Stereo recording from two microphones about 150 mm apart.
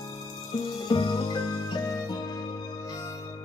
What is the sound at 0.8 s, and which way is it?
Music, 30° left (ahead or behind).